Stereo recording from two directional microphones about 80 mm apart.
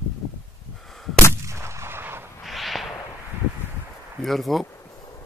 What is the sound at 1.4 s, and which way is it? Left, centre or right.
Artillery fire, right.